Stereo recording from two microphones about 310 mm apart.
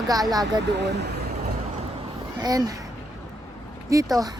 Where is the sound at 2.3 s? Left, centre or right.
Centre.